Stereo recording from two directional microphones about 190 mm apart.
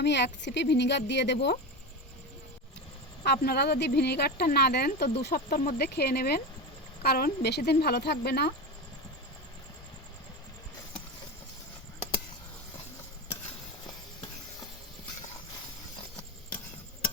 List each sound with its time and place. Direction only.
0.0 s speech: 65° left (ahead or behind)
3.2 s speech: 55° left (ahead or behind)